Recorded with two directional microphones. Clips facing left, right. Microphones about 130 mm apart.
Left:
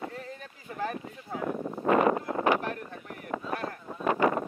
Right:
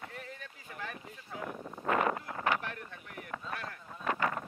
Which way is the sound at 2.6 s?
40° left (ahead or behind).